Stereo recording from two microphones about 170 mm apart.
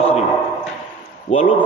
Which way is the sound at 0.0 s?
40° left (ahead or behind).